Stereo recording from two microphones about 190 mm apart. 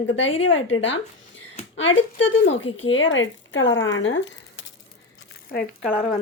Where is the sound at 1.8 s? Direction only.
80° left.